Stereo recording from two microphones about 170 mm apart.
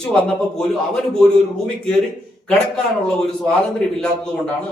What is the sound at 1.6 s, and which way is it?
Speech, 5° left (ahead or behind).